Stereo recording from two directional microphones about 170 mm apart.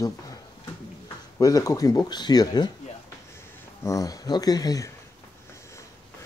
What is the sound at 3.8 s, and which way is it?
Speech, 20° left (ahead or behind).